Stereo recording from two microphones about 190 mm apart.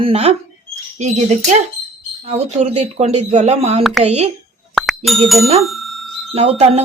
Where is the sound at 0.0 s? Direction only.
35° right (ahead or behind).